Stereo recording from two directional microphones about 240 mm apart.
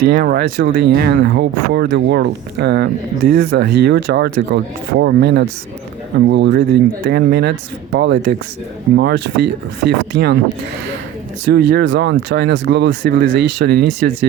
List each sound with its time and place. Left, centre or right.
0.0 s speech: right
11.7 s speech: right